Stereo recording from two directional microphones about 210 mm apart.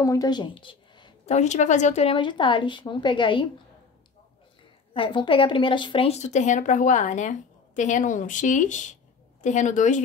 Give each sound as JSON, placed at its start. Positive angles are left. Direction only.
{"t": 0.0, "sound": "speech", "side_deg": 15}
{"t": 4.9, "sound": "a woman's voice", "side_deg": 25}